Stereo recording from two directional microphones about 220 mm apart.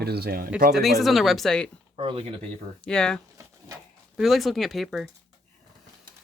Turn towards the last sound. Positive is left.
turn(degrees=0)  # may be behind; listen again after turning